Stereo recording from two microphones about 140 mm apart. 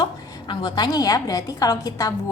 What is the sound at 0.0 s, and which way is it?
A woman's voice, 30° left (ahead or behind).